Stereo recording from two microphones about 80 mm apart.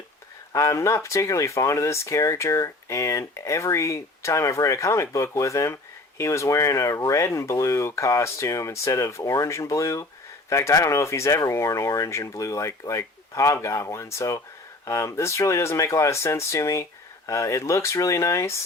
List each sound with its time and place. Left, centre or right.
0.5 s speech: left